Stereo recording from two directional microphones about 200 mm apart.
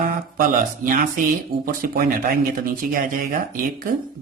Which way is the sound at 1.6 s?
45° right (ahead or behind).